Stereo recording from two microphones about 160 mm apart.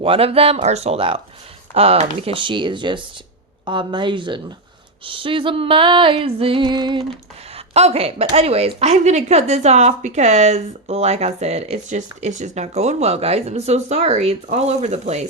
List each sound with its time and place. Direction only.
0.0 s music: 35° right (ahead or behind)
7.5 s speech: 40° right (ahead or behind)